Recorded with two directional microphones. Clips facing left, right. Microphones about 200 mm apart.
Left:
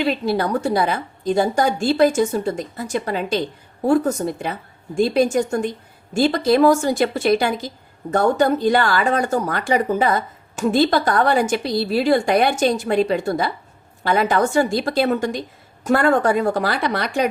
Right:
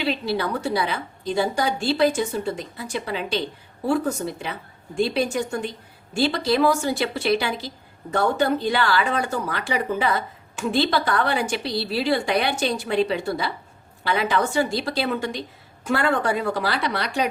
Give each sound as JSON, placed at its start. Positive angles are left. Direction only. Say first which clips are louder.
{"t": 0.0, "sound": "speech", "louder": "left 4 dB", "side_deg": 45}